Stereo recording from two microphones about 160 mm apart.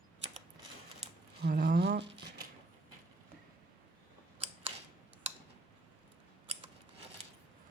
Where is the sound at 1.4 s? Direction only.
90° right.